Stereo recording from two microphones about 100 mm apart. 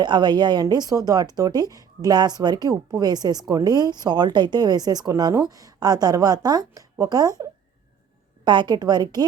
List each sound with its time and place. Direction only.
0.0 s a woman's voice: 50° right (ahead or behind)
8.4 s a woman's voice: 50° right (ahead or behind)